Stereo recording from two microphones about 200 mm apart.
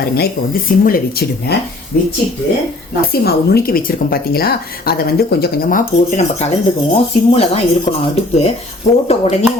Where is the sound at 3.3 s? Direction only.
50° left (ahead or behind).